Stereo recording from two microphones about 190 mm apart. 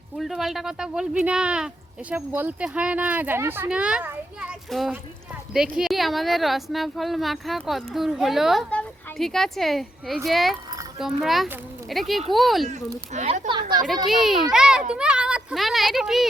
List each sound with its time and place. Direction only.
0.2 s speech: centre (ahead or behind)
13.1 s speech: 40° right (ahead or behind)
13.5 s speech: 25° right (ahead or behind)
13.8 s speech: centre (ahead or behind)